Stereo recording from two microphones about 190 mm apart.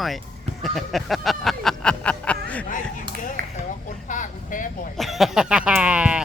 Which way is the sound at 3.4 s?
50° right (ahead or behind).